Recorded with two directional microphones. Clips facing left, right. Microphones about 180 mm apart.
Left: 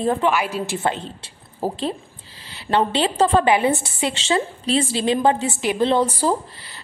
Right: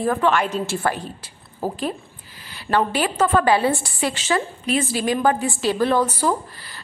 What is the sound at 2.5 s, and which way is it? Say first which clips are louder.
A woman's voice: left 1 dB; 25° left (ahead or behind).